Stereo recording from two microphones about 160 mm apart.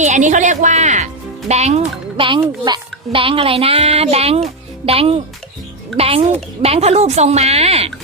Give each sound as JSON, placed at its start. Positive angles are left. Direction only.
{"t": 0.0, "sound": "speech", "side_deg": -50}